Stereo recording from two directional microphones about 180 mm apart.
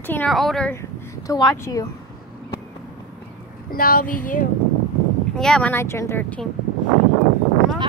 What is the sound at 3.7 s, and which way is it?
Female singing, 50° left (ahead or behind).